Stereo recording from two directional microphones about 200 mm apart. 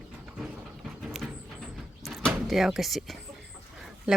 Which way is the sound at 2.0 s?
Centre (ahead or behind).